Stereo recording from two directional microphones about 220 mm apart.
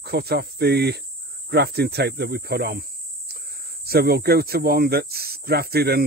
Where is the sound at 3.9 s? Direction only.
45° right (ahead or behind).